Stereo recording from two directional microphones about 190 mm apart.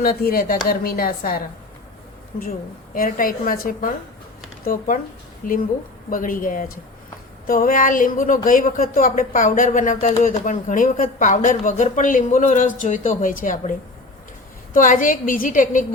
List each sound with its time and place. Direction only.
0.0 s speech: 50° left (ahead or behind)
2.9 s speech: 45° left (ahead or behind)
14.7 s speech: 45° left (ahead or behind)